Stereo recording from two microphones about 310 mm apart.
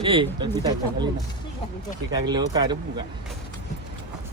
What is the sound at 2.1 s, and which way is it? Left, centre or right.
Speech, centre.